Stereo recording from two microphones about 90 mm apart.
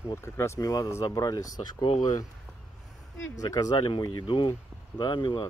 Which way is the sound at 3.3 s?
40° left (ahead or behind).